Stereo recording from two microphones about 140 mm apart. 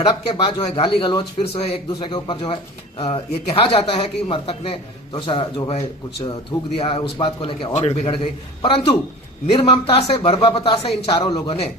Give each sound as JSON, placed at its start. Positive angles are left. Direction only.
{"t": 0.0, "sound": "a man's voice", "side_deg": 35}
{"t": 7.7, "sound": "a man's voice", "side_deg": 50}